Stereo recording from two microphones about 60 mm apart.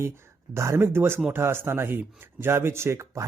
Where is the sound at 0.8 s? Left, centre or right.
Right.